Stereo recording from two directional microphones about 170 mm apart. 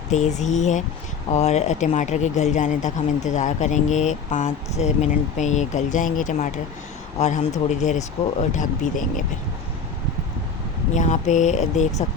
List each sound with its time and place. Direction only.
0.1 s speech: 45° left (ahead or behind)
10.9 s speech: 45° left (ahead or behind)